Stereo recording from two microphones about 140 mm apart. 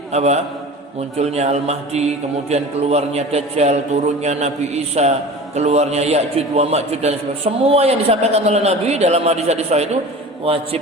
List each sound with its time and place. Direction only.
0.1 s a man's voice: 50° right (ahead or behind)